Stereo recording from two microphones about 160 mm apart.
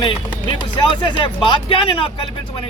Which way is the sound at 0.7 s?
30° left (ahead or behind).